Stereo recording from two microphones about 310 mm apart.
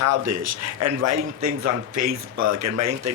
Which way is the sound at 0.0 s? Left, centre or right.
Right.